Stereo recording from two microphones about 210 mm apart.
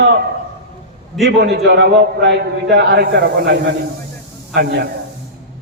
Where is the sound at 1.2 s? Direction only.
50° right (ahead or behind).